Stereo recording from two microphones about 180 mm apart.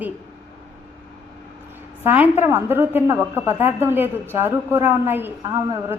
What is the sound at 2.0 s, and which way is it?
A woman's voice, 10° right (ahead or behind).